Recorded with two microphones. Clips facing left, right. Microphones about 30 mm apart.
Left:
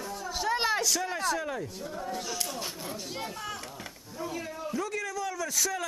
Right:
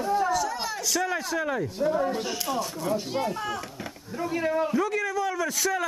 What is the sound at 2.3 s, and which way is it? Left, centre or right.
A child's voice, centre.